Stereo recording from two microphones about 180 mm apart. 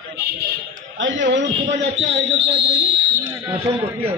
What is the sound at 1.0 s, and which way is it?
Speech, 90° right.